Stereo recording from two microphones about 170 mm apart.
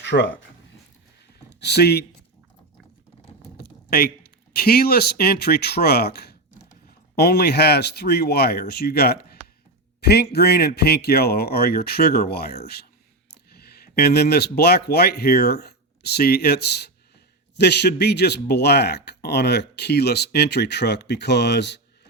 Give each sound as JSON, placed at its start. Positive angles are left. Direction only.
{"t": 0.0, "sound": "speech", "side_deg": 90}
{"t": 1.5, "sound": "speech", "side_deg": 80}
{"t": 3.6, "sound": "speech", "side_deg": 65}